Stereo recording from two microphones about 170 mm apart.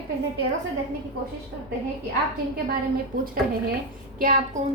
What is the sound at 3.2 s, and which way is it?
A woman's voice, 60° right (ahead or behind).